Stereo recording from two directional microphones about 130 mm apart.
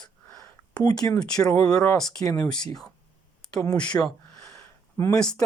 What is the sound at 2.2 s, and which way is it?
Speech, 30° left (ahead or behind).